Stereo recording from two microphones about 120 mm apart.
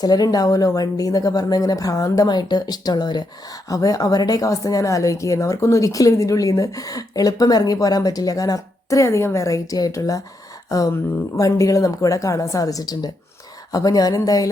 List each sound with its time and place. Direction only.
0.0 s speech: 35° left (ahead or behind)